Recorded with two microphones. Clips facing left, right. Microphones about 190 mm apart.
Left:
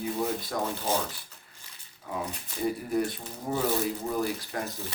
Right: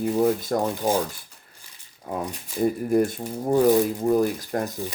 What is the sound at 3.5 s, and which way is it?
Speech, 45° right (ahead or behind).